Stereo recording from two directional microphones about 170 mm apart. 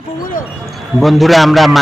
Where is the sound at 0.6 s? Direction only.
Centre (ahead or behind).